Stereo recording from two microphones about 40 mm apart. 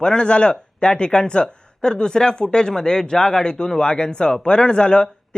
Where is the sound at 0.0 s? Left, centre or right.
Left.